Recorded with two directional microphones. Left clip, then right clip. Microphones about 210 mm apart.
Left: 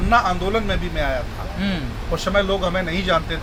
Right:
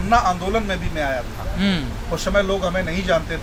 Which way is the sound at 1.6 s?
50° right (ahead or behind).